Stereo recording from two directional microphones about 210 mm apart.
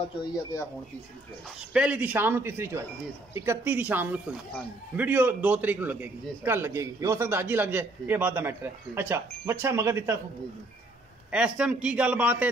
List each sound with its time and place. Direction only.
0.0 s speech: 15° left (ahead or behind)
1.7 s a man's voice: 5° right (ahead or behind)
11.3 s a man's voice: 5° right (ahead or behind)